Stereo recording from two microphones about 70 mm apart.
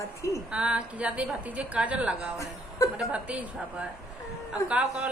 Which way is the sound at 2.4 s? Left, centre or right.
Left.